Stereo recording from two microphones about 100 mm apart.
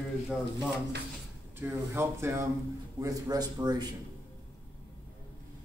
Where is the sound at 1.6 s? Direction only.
25° right (ahead or behind).